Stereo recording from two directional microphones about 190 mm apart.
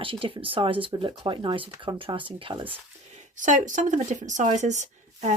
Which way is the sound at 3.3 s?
40° right (ahead or behind).